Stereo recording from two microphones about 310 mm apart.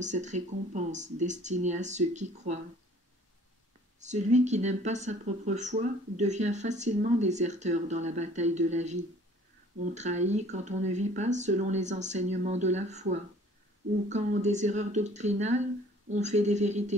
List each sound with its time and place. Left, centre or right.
0.0 s speech: right
4.0 s speech: right